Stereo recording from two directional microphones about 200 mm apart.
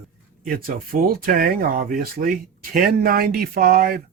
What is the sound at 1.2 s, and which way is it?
Speech, 45° right (ahead or behind).